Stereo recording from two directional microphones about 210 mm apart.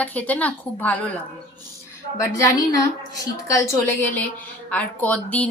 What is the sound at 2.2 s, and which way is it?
A woman's voice, 15° left (ahead or behind).